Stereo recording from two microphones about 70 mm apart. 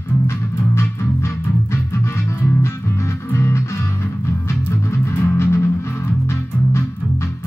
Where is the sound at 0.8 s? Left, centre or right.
Left.